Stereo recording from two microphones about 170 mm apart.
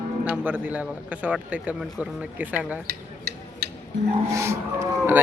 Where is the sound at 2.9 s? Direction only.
70° right (ahead or behind).